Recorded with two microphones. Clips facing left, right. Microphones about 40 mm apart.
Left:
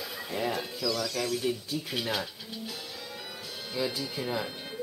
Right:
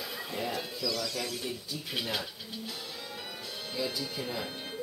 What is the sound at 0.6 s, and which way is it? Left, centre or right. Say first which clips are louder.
A child's voice: left 3 dB; centre.